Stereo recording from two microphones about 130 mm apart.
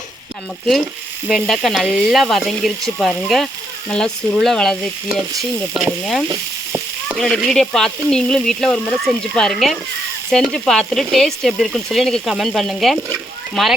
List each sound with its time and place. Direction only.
1.3 s speech: centre (ahead or behind)
6.2 s frying: 30° right (ahead or behind)
7.2 s speech: 5° left (ahead or behind)